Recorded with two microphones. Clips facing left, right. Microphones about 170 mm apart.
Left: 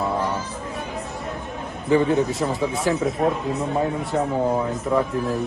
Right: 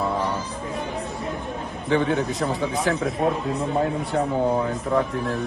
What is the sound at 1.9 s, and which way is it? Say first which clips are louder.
Speech: left 3 dB; centre (ahead or behind).